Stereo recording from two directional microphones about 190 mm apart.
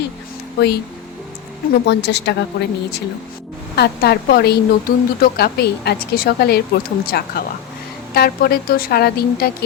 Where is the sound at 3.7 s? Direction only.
60° left (ahead or behind).